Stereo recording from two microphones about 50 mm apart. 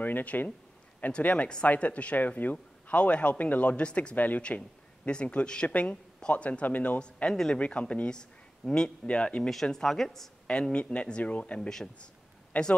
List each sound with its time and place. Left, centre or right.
0.0 s speech: left
2.5 s a man's voice: left
9.5 s speech: centre
10.4 s speech: centre